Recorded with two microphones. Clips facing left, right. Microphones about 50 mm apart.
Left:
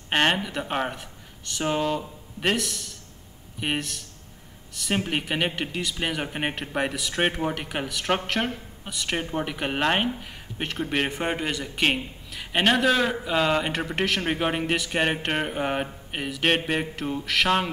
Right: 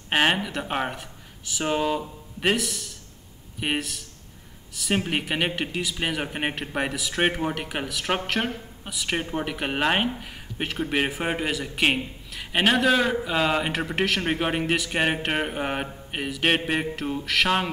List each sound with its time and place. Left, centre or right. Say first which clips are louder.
0.1 s speech: right 1 dB; centre